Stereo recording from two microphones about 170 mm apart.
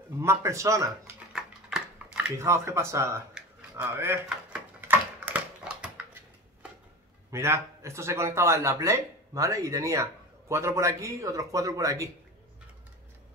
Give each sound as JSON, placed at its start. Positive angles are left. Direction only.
{"t": 0.2, "sound": "speech", "side_deg": -15}
{"t": 2.3, "sound": "speech", "side_deg": -15}
{"t": 3.7, "sound": "typewriter", "side_deg": -15}
{"t": 7.2, "sound": "speech", "side_deg": -15}